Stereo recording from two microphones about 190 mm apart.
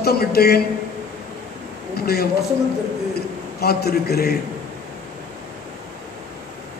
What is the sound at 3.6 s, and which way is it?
Speech, 55° left (ahead or behind).